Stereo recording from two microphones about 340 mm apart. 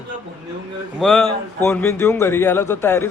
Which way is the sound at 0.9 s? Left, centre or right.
Centre.